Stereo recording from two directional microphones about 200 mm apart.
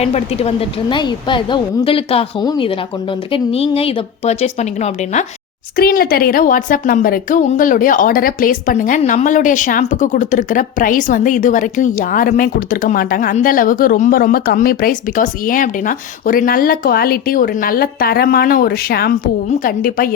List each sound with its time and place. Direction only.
0.0 s a woman's voice: 30° left (ahead or behind)
5.7 s a woman's voice: 50° left (ahead or behind)